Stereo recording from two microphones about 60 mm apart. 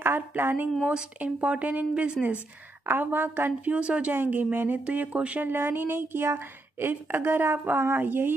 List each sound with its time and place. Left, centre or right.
0.4 s a woman's voice: right
0.8 s speech: right
2.9 s a woman's voice: right
3.7 s speech: centre
4.1 s a woman's voice: right
5.5 s a woman's voice: right